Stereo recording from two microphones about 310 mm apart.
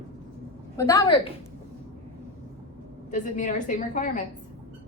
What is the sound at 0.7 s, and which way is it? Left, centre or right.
Speech, centre.